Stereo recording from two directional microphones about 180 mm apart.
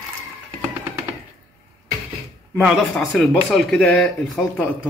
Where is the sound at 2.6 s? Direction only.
Centre (ahead or behind).